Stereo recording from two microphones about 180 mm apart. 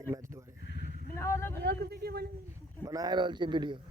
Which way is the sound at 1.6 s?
65° right (ahead or behind).